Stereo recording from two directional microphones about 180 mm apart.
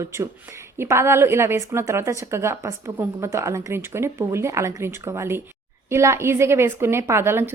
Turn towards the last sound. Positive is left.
turn(degrees=-15)  # may be behind; listen again after turning